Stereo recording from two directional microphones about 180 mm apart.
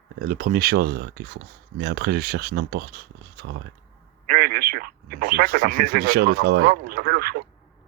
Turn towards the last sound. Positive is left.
turn(degrees=-55)  # may be behind; listen again after turning